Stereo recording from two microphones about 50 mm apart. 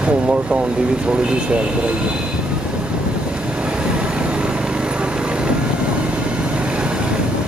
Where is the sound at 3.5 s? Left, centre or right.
Right.